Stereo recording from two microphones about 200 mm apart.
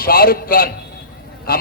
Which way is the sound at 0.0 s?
45° left (ahead or behind).